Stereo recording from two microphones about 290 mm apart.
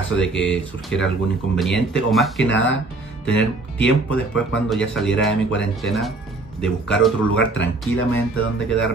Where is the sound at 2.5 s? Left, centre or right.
Left.